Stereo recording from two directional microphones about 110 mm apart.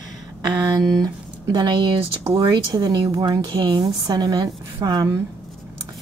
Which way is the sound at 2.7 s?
35° right (ahead or behind).